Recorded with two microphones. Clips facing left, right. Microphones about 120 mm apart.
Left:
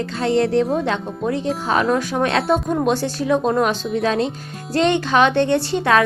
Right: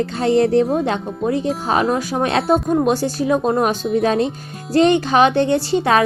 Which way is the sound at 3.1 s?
45° right (ahead or behind).